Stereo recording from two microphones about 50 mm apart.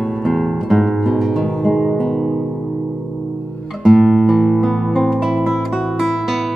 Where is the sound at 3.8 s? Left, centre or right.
Centre.